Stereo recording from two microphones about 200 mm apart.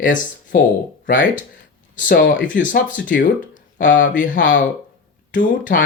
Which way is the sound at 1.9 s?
40° left (ahead or behind).